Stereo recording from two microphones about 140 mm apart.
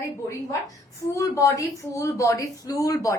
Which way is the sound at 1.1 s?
20° left (ahead or behind).